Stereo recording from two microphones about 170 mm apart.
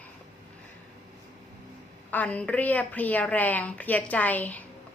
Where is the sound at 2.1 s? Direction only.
10° left (ahead or behind).